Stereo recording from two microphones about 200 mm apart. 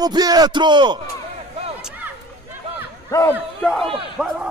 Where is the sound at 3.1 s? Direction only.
15° left (ahead or behind).